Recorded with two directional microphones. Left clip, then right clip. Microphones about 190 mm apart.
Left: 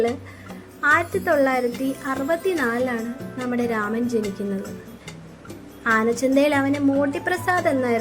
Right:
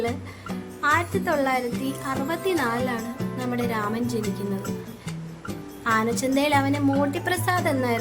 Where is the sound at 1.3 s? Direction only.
15° left (ahead or behind).